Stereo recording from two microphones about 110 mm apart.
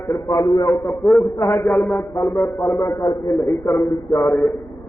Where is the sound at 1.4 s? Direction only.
30° left (ahead or behind).